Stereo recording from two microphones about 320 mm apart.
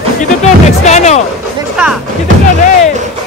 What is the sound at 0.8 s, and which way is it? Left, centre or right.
Music, left.